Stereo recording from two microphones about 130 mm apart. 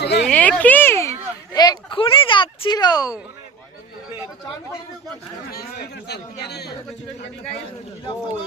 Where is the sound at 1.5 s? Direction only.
30° left (ahead or behind).